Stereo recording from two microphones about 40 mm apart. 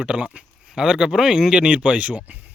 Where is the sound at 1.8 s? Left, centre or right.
Right.